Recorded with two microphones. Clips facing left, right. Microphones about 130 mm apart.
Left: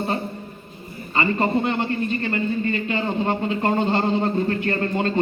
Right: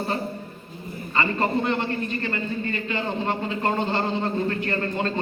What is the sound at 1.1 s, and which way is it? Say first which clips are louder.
Speech: left 3 dB; 25° left (ahead or behind).